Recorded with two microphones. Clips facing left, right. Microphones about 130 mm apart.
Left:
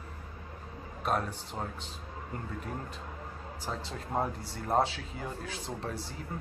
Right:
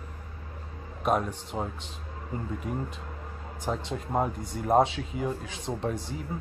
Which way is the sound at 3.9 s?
15° right (ahead or behind).